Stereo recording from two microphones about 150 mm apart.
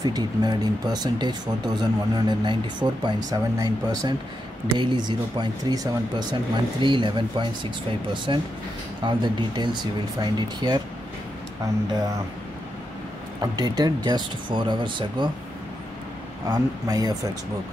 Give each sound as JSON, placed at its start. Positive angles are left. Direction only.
{"t": 0.0, "sound": "speech", "side_deg": -25}
{"t": 13.4, "sound": "speech", "side_deg": -25}
{"t": 16.4, "sound": "speech", "side_deg": -25}